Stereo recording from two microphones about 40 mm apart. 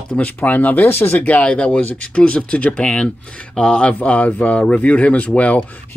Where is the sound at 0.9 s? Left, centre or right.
Left.